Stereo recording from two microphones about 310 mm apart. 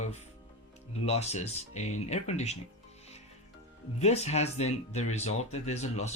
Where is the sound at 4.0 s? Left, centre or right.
Left.